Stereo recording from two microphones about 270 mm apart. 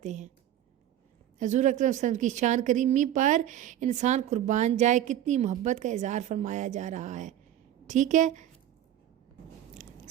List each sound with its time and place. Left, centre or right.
0.0 s a woman's voice: right
1.4 s a woman's voice: right